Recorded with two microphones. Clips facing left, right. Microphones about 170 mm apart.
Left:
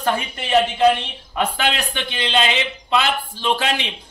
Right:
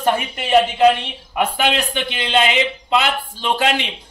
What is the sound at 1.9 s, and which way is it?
A man's voice, 15° right (ahead or behind).